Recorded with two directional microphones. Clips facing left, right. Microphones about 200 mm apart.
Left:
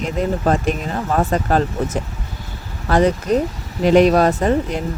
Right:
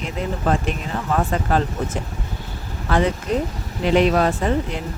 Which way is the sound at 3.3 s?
40° left (ahead or behind).